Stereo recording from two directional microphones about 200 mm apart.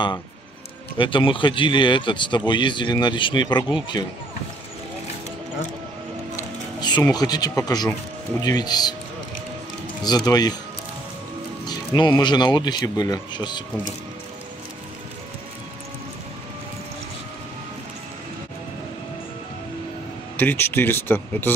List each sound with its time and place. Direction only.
0.9 s speech: 25° left (ahead or behind)
6.3 s speech: 20° left (ahead or behind)
10.0 s speech: 20° left (ahead or behind)
11.6 s speech: 20° left (ahead or behind)
20.3 s speech: 10° left (ahead or behind)